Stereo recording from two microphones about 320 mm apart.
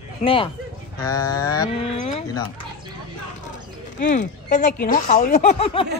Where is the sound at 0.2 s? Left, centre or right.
Centre.